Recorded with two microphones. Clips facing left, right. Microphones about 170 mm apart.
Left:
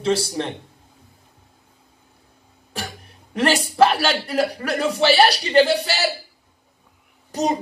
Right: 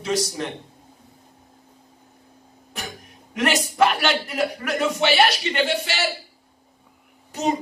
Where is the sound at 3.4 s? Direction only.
30° left (ahead or behind).